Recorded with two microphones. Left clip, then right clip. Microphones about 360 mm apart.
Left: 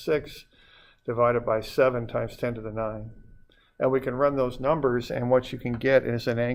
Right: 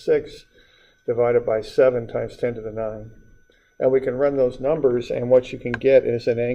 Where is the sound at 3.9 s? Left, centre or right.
Left.